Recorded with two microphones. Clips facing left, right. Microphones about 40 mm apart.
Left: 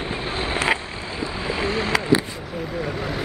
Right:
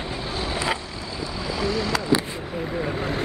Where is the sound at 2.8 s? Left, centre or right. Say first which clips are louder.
Right 1 dB; centre.